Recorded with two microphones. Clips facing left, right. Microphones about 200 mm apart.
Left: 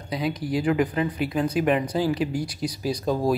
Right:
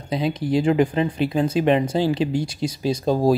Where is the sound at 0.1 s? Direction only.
25° right (ahead or behind).